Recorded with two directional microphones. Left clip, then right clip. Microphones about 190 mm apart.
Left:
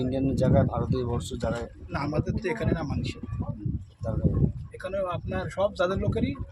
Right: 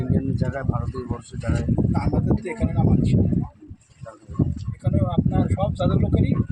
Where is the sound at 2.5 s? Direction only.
5° left (ahead or behind).